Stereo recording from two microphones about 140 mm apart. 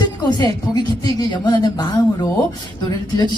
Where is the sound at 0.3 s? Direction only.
30° left (ahead or behind).